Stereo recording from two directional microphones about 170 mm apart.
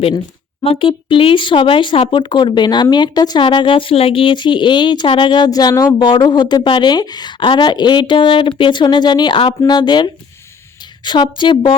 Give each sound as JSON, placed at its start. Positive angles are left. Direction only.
{"t": 0.6, "sound": "speech", "side_deg": 30}